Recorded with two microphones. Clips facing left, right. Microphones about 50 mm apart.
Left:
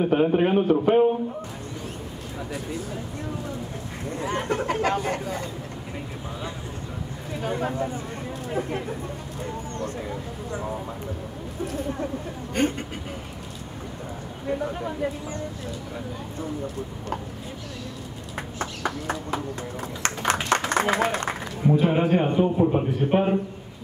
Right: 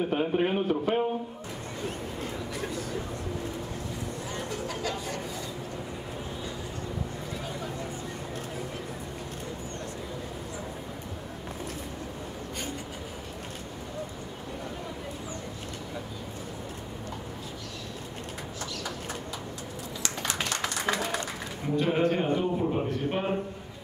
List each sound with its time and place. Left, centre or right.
0.0 s a man's voice: centre
4.2 s speech: left
7.4 s speech: left
12.6 s speech: left
18.6 s clip-clop: left
20.5 s a sound: left
21.0 s speech: left
21.6 s a man's voice: centre